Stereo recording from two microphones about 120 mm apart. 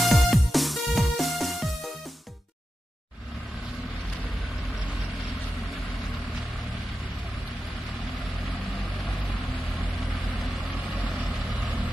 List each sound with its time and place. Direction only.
0.0 s music: centre (ahead or behind)